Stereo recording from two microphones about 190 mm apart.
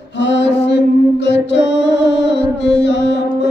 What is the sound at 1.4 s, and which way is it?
Music, 65° left (ahead or behind).